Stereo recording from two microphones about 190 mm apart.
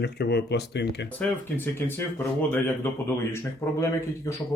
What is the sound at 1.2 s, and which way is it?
Speech, 10° left (ahead or behind).